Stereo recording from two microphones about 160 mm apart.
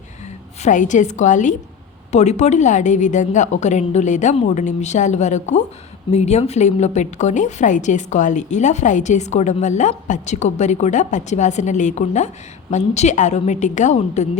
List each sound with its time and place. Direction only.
0.6 s a woman's voice: 50° left (ahead or behind)